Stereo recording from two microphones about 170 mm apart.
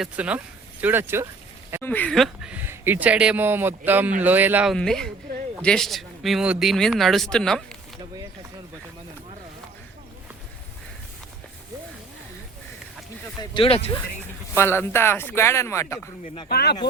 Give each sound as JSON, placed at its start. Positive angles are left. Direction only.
{"t": 0.0, "sound": "speech", "side_deg": -10}
{"t": 1.8, "sound": "speech", "side_deg": 10}
{"t": 13.4, "sound": "speech", "side_deg": 30}
{"t": 14.5, "sound": "speech", "side_deg": 15}
{"t": 16.5, "sound": "speech", "side_deg": 70}